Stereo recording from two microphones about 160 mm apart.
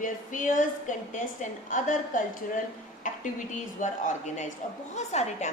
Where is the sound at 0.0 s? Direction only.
55° left (ahead or behind).